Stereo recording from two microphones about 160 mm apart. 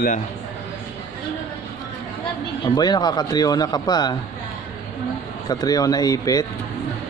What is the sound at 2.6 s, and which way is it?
Speech, 25° left (ahead or behind).